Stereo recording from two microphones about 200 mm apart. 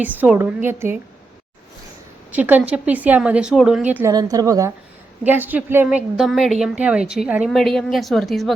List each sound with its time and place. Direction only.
0.0 s a woman's voice: 10° right (ahead or behind)
2.3 s a woman's voice: 10° right (ahead or behind)
4.1 s a woman's voice: 20° right (ahead or behind); by 8.5 s centre (ahead or behind)